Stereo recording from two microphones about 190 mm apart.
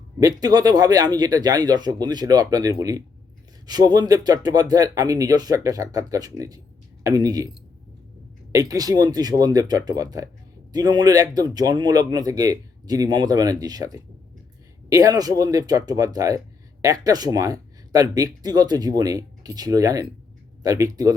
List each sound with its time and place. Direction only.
0.2 s speech: 20° right (ahead or behind)
8.5 s speech: 20° right (ahead or behind)